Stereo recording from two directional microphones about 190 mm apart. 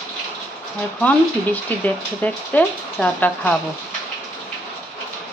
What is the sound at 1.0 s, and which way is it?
Speech, 10° left (ahead or behind).